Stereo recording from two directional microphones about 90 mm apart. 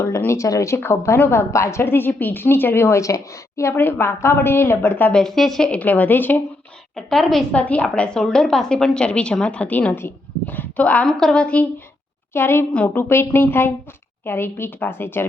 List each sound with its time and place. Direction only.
0.3 s a woman's voice: 35° left (ahead or behind)
5.1 s a woman's voice: 5° left (ahead or behind); by 6.4 s 20° left (ahead or behind)
6.9 s a woman's voice: 5° left (ahead or behind)
7.5 s a woman's voice: 15° left (ahead or behind)
12.3 s a woman's voice: 25° left (ahead or behind)
12.7 s a woman's voice: 15° left (ahead or behind)
13.0 s a woman's voice: 25° left (ahead or behind)